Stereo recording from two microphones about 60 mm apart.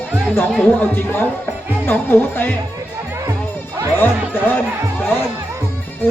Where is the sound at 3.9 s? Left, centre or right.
Left.